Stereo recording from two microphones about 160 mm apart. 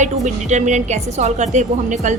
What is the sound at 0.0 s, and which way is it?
A woman's voice, 45° right (ahead or behind).